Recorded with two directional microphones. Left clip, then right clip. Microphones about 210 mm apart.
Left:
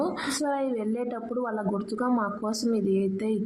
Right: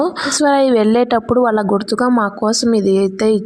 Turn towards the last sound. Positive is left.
turn(degrees=-40)  # may be behind; listen again after turning